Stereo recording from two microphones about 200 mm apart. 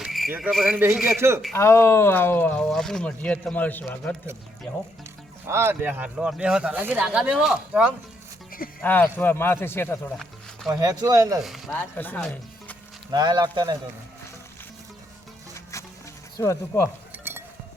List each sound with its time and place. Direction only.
0.0 s a sound: centre (ahead or behind)
0.3 s a man's voice: 5° right (ahead or behind)
1.5 s speech: 15° left (ahead or behind)
5.5 s speech: 10° right (ahead or behind)
8.8 s speech: 10° left (ahead or behind)
10.7 s a man's voice: 15° right (ahead or behind)
11.3 s speech: centre (ahead or behind)
13.1 s speech: 20° right (ahead or behind)
15.7 s a sound: 15° left (ahead or behind)
16.4 s speech: 15° left (ahead or behind)